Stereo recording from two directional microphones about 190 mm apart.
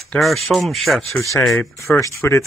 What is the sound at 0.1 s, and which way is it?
Speech, centre (ahead or behind).